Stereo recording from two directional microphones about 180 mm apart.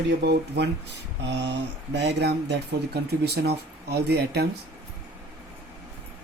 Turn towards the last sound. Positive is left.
turn(degrees=-65)  # may be behind; listen again after turning